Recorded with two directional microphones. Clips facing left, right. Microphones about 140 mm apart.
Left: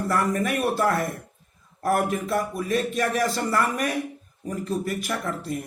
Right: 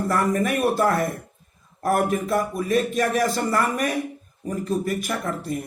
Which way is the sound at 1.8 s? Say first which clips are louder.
Right 2 dB; 45° right (ahead or behind).